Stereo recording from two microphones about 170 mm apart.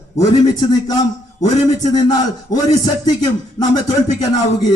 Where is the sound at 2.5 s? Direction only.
20° left (ahead or behind).